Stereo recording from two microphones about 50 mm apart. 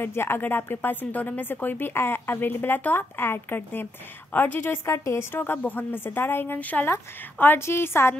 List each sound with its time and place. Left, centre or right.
0.0 s a woman's voice: left
4.8 s a woman's voice: left
5.3 s speech: left
7.3 s a woman's voice: left